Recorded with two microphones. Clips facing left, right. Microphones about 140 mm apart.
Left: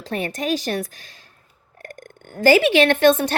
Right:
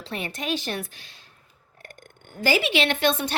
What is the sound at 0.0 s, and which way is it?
A child's voice, 45° left (ahead or behind).